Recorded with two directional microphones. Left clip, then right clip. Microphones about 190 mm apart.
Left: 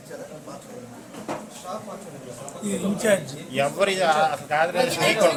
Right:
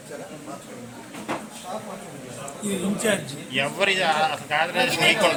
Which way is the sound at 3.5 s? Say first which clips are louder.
Even; 45° left (ahead or behind).